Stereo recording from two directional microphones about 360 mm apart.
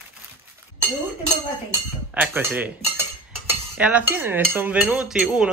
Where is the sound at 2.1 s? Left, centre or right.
Centre.